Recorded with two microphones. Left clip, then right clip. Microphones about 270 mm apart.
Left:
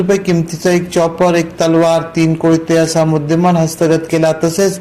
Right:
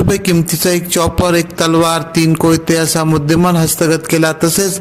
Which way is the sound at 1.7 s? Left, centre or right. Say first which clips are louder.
Left 1 dB; right.